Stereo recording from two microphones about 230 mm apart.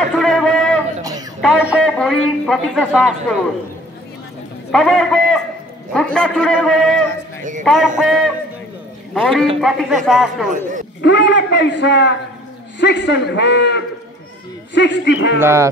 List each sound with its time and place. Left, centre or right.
0.1 s a sound: centre
1.4 s a man's voice: centre
4.7 s a man's voice: centre
11.0 s a man's voice: left
15.4 s speech: centre